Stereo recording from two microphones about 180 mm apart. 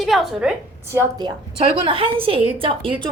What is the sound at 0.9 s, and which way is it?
A woman's voice, 25° right (ahead or behind).